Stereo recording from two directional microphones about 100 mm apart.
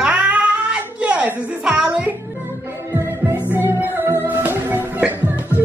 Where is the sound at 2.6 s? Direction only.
20° right (ahead or behind).